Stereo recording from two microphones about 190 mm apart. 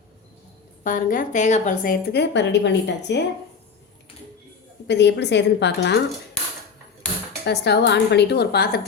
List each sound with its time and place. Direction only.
0.9 s a woman's voice: 45° left (ahead or behind)
2.3 s a woman's voice: 70° left (ahead or behind)
4.9 s a woman's voice: 65° left (ahead or behind)
7.4 s a woman's voice: 60° left (ahead or behind)